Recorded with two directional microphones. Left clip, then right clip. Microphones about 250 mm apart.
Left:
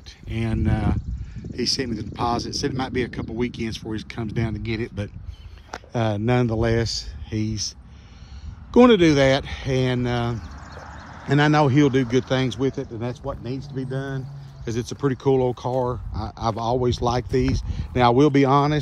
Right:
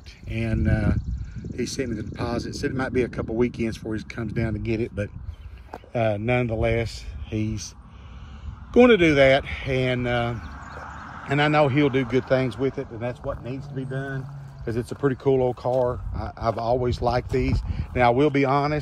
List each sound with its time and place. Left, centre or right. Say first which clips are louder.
0.3 s speech: even; centre
5.9 s speech: even; centre
8.7 s speech: left 1 dB; centre
10.6 s a sound: right 2 dB; right
11.2 s speech: left 1 dB; centre